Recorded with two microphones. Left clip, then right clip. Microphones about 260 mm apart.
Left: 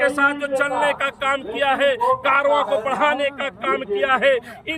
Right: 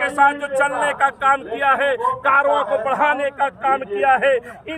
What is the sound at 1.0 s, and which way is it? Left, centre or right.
A man's voice, centre.